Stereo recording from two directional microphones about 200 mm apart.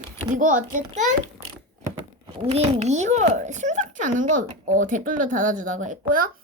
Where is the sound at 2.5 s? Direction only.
30° right (ahead or behind).